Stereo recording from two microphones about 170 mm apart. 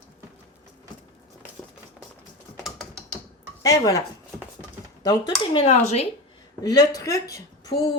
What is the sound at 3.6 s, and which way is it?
Speech, 20° left (ahead or behind).